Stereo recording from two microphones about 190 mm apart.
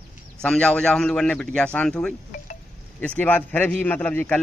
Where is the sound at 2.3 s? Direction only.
40° left (ahead or behind).